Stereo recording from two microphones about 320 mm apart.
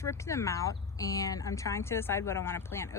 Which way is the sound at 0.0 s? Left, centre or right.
Centre.